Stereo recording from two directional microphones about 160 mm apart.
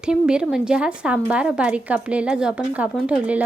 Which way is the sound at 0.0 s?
5° right (ahead or behind).